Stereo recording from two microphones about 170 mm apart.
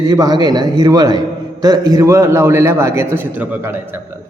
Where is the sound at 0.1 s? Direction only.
25° right (ahead or behind).